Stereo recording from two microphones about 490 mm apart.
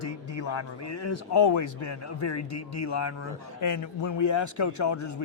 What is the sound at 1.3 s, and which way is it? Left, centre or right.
Speech, left.